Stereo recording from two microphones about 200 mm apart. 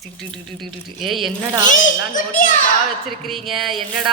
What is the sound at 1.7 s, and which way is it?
Speech, 40° left (ahead or behind).